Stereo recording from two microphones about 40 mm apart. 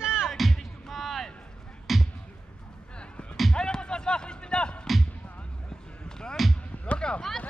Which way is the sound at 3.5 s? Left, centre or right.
Left.